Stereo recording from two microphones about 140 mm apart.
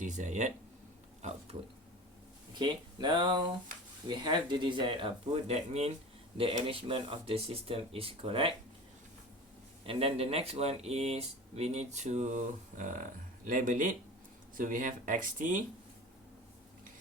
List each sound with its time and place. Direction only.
0.0 s speech: 60° right (ahead or behind)
2.6 s speech: 35° right (ahead or behind)
9.8 s speech: 40° right (ahead or behind); by 15.6 s 65° right (ahead or behind)